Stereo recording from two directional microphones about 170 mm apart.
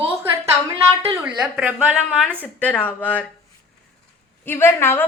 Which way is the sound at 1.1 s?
5° right (ahead or behind).